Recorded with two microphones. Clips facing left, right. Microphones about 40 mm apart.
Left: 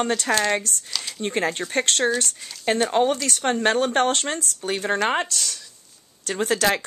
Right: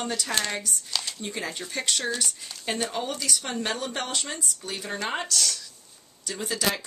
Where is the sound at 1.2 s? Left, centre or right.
Left.